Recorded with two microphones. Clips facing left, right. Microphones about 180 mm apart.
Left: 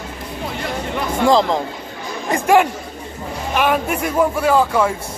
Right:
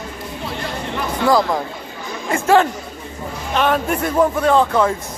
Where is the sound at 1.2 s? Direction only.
20° left (ahead or behind).